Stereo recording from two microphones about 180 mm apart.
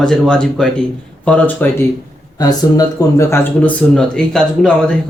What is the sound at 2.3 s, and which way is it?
Speech, 20° left (ahead or behind).